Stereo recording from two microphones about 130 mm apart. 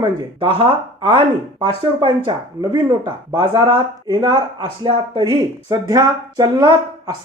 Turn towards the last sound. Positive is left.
turn(degrees=-30)  # may be behind; listen again after turning